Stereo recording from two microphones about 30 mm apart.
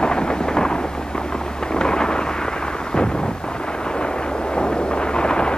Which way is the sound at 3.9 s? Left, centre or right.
Left.